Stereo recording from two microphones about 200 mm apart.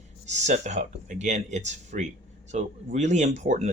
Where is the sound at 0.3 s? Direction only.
35° right (ahead or behind).